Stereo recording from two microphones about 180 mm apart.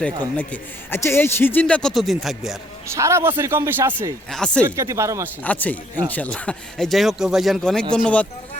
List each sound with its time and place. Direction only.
0.0 s a man's voice: 10° left (ahead or behind)
2.9 s speech: 15° right (ahead or behind)
4.3 s speech: 5° left (ahead or behind)
4.6 s speech: 15° right (ahead or behind)
5.4 s a man's voice: 10° left (ahead or behind)